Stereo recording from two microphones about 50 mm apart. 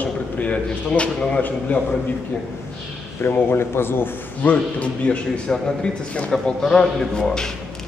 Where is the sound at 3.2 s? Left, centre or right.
Left.